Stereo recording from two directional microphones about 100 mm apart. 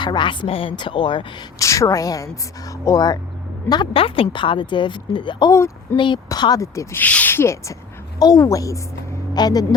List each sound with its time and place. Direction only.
0.0 s speech: 50° left (ahead or behind)
1.5 s a woman's voice: 30° left (ahead or behind)
3.9 s speech: 70° left (ahead or behind)
5.5 s a woman's voice: 30° left (ahead or behind)
7.0 s a woman's voice: 15° left (ahead or behind); by 9.6 s 40° left (ahead or behind)